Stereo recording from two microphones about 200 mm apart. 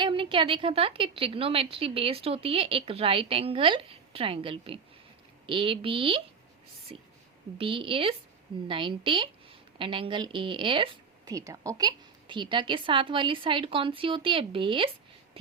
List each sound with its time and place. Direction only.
0.0 s a woman's voice: 25° right (ahead or behind)